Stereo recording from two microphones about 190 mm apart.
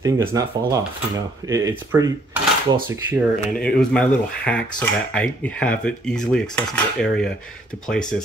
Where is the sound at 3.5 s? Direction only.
5° left (ahead or behind).